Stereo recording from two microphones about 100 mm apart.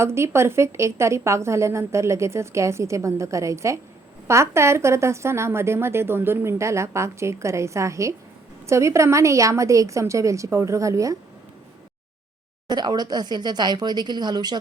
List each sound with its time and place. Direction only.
0.0 s a woman's voice: 25° right (ahead or behind)
12.6 s speech: 45° right (ahead or behind)